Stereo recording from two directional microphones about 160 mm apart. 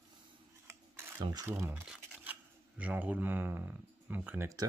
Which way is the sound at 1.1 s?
15° right (ahead or behind).